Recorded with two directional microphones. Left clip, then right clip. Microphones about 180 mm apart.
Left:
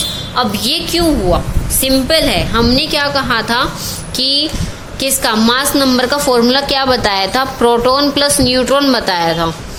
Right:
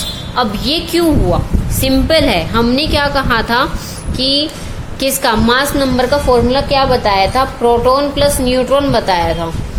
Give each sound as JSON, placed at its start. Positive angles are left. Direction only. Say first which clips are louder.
{"t": 0.3, "sound": "a woman's voice", "louder": "even", "side_deg": 0}
{"t": 1.8, "sound": "a woman's voice", "louder": "even", "side_deg": 0}